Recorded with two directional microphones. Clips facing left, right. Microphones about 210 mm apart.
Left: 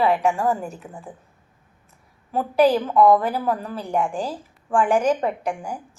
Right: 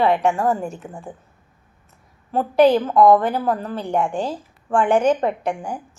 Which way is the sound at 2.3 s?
30° right (ahead or behind).